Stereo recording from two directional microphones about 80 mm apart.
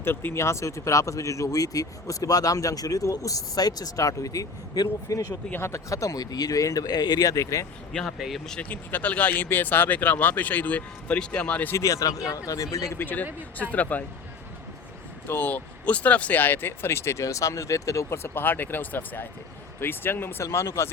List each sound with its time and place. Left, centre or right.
0.0 s speech: left
5.5 s speech: left
8.7 s speech: left
11.8 s speech: left
13.0 s speech: left
15.3 s speech: left